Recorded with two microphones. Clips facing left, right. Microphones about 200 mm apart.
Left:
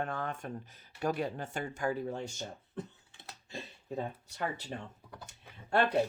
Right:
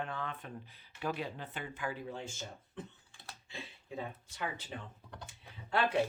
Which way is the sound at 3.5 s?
45° left (ahead or behind).